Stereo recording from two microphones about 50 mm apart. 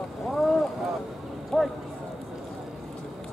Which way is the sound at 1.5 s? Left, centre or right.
Centre.